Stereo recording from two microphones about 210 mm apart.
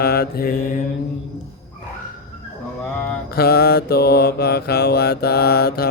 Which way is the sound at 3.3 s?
50° left (ahead or behind).